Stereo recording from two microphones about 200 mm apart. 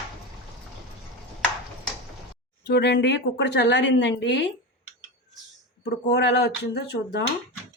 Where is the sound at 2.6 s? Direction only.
60° left (ahead or behind).